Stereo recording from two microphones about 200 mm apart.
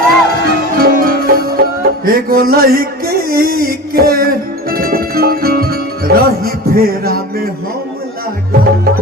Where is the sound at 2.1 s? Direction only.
45° right (ahead or behind).